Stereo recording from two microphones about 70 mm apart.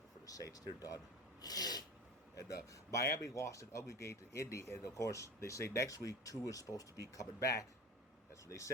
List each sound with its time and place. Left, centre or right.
0.3 s speech: left
2.9 s speech: left